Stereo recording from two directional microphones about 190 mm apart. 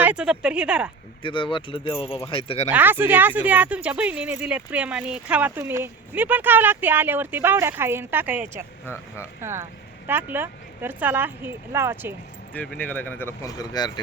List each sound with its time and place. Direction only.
0.0 s speech: 5° right (ahead or behind)
1.2 s speech: 25° left (ahead or behind)
2.7 s speech: 10° right (ahead or behind)
12.5 s speech: 10° left (ahead or behind)